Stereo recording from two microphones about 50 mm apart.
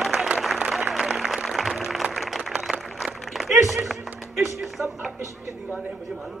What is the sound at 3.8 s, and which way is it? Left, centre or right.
Music, centre.